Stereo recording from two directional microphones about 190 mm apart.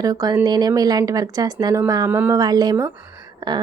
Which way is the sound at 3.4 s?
20° right (ahead or behind).